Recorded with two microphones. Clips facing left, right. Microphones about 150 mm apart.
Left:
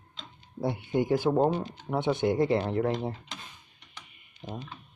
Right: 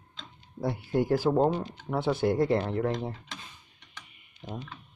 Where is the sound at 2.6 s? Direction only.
15° left (ahead or behind).